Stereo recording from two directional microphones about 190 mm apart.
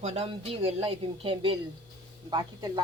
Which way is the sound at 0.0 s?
35° right (ahead or behind).